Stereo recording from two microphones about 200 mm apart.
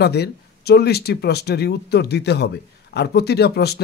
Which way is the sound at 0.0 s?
55° left (ahead or behind).